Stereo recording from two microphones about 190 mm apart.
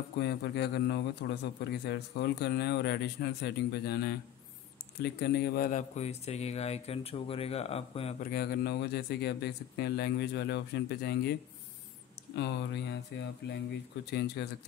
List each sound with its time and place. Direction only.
0.2 s a man's voice: 60° left (ahead or behind); by 8.2 s 30° left (ahead or behind)
8.2 s a man's voice: 50° left (ahead or behind)
12.4 s a man's voice: 65° left (ahead or behind)